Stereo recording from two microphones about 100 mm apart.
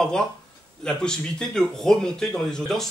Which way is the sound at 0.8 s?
10° left (ahead or behind).